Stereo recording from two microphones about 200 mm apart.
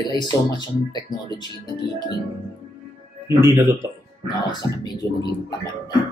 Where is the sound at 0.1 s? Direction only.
20° left (ahead or behind).